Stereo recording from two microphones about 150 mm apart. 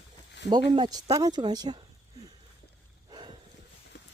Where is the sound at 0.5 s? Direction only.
25° right (ahead or behind).